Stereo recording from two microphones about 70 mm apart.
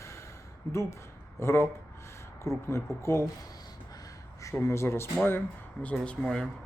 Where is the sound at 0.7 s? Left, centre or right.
Left.